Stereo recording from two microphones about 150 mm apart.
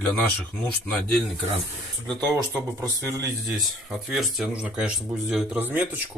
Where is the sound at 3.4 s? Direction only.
Centre (ahead or behind).